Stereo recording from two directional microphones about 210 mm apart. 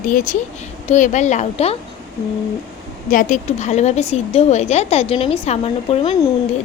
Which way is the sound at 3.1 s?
40° left (ahead or behind).